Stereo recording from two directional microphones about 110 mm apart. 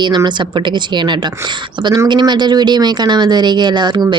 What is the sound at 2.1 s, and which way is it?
Speech, 40° right (ahead or behind).